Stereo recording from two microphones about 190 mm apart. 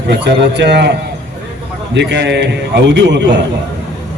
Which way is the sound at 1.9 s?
65° right (ahead or behind).